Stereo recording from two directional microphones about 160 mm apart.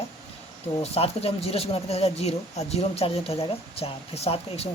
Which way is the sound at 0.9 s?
40° left (ahead or behind).